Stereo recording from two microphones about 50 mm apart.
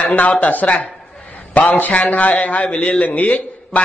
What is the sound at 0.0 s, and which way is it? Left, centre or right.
A man's voice, left.